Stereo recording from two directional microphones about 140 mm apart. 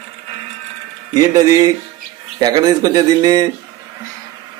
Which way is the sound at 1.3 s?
25° right (ahead or behind).